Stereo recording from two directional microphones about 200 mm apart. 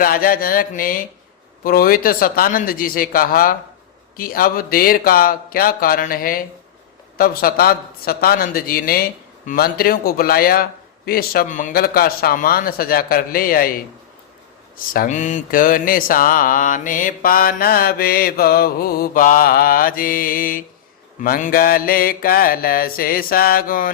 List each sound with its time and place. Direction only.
0.0 s mantra: 45° left (ahead or behind)
14.9 s mantra: 40° left (ahead or behind)